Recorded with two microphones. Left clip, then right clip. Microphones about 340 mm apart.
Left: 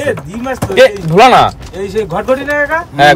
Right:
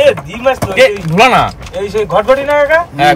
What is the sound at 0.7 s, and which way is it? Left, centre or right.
Speech, left.